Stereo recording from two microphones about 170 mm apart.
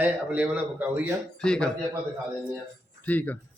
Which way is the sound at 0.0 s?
10° right (ahead or behind).